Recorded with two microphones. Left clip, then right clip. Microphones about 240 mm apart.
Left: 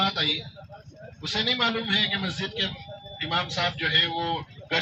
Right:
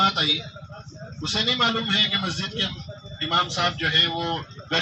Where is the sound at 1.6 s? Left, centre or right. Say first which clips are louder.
Right 3 dB; left.